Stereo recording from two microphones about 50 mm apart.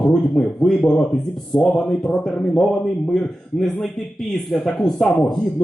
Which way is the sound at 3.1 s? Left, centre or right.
Centre.